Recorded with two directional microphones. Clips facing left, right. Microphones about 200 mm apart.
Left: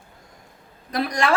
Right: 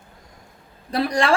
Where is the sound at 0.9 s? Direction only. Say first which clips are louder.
Right 2 dB; 30° right (ahead or behind).